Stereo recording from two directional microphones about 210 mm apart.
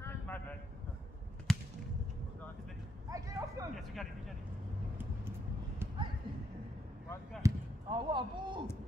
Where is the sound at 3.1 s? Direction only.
15° right (ahead or behind).